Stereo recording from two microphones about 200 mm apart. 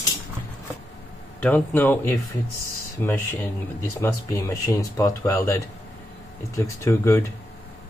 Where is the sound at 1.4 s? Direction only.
10° left (ahead or behind).